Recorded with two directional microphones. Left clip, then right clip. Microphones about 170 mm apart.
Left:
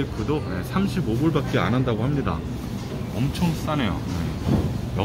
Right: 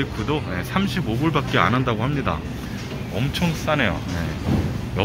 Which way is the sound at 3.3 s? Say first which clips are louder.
Right 6 dB; centre (ahead or behind).